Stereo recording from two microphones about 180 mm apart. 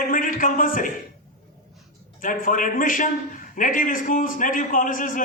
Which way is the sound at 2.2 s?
50° left (ahead or behind).